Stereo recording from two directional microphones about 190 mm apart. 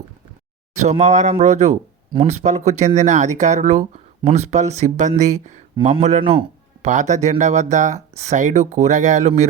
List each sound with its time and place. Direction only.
0.8 s speech: 40° right (ahead or behind)